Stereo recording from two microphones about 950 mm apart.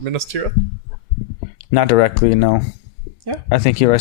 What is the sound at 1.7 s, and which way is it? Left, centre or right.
Speech, left.